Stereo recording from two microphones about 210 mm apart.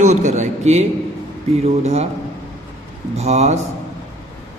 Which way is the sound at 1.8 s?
30° right (ahead or behind).